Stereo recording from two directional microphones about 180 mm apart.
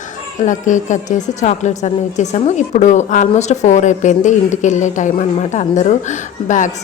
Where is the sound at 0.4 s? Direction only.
45° left (ahead or behind).